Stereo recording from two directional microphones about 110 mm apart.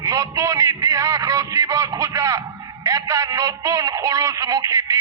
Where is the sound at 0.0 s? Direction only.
30° right (ahead or behind).